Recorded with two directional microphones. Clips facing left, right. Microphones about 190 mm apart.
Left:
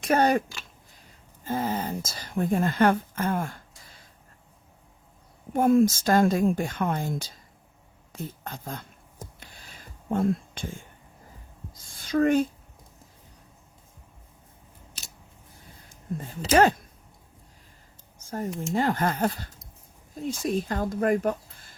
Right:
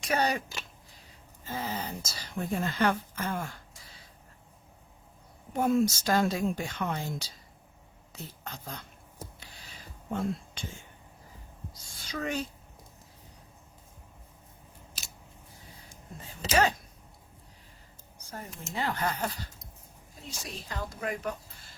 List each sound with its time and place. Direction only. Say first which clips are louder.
0.0 s a woman's voice: left 7 dB; 50° left (ahead or behind)
1.5 s a woman's voice: left 7 dB; 50° left (ahead or behind)
5.5 s a woman's voice: left 6 dB; 50° left (ahead or behind)
9.4 s a sound: left 1 dB; 50° left (ahead or behind)
15.8 s speech: left 14 dB; 50° left (ahead or behind)
18.2 s a sound: left 10 dB; 45° left (ahead or behind)
18.7 s a woman's voice: left 6 dB; 45° left (ahead or behind)